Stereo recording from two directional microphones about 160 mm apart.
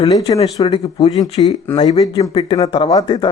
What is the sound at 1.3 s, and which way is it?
Speech, 40° left (ahead or behind).